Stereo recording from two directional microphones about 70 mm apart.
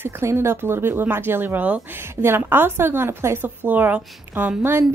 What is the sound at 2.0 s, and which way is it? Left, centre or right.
Speech, right.